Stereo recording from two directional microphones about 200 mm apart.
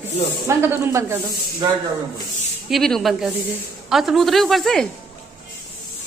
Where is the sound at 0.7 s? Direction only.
10° right (ahead or behind).